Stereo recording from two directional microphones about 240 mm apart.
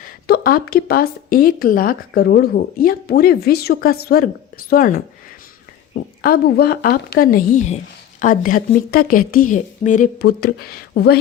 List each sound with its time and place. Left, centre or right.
0.0 s speech: left